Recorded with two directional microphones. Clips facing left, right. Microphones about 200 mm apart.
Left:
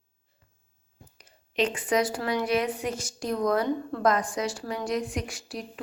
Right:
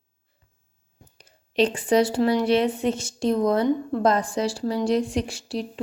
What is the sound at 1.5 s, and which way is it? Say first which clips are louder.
A woman's voice: right 6 dB; 30° right (ahead or behind).